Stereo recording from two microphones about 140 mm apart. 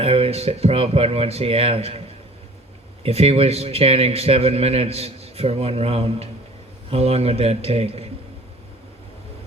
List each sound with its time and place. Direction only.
0.0 s a man's voice: 45° right (ahead or behind)
3.0 s a man's voice: 45° right (ahead or behind)